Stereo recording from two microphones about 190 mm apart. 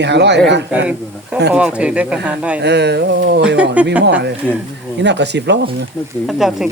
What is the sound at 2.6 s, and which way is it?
Speech, 60° right (ahead or behind).